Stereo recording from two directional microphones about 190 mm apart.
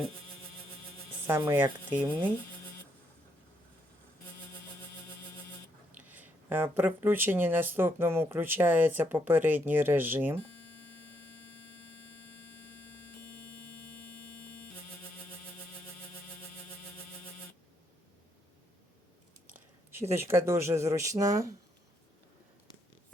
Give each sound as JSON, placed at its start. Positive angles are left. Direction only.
{"t": 1.4, "sound": "speech", "side_deg": -20}
{"t": 6.1, "sound": "speech", "side_deg": -10}
{"t": 19.5, "sound": "speech", "side_deg": -15}